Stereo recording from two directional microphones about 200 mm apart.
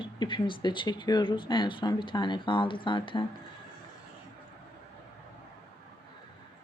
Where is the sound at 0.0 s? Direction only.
25° left (ahead or behind).